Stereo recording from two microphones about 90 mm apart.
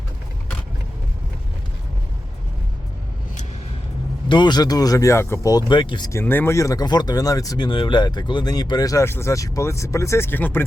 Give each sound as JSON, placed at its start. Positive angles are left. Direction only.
{"t": 4.3, "sound": "speech", "side_deg": 55}
{"t": 5.5, "sound": "speech", "side_deg": 50}
{"t": 6.1, "sound": "speech", "side_deg": 25}
{"t": 6.8, "sound": "speech", "side_deg": 50}
{"t": 7.7, "sound": "speech", "side_deg": 65}